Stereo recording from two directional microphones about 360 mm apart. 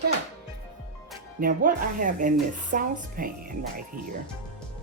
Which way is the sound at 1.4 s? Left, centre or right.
Right.